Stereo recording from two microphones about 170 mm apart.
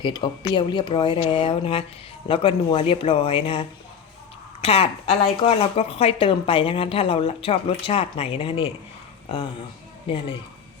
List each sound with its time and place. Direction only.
0.0 s speech: 30° left (ahead or behind)
10.1 s speech: 30° left (ahead or behind)